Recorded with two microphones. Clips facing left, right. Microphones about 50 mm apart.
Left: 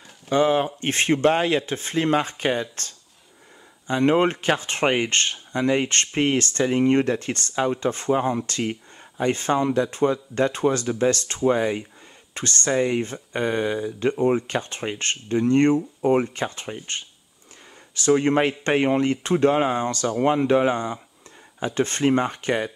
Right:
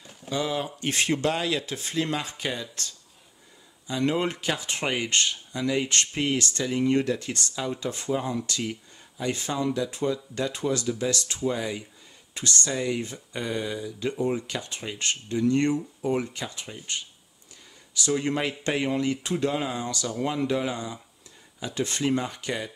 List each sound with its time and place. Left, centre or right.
0.3 s speech: left